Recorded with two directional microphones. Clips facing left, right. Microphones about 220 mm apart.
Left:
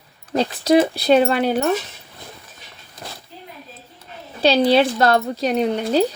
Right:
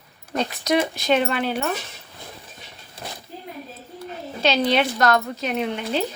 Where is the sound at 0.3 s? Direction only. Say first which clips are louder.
Left 6 dB; 30° left (ahead or behind).